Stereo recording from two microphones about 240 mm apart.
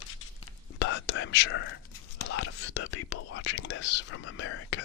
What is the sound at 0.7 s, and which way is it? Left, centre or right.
Whispering, left.